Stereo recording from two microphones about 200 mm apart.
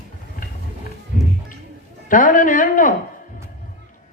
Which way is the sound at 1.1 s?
40° left (ahead or behind).